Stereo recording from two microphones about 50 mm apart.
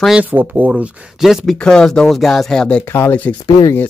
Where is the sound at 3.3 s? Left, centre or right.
Left.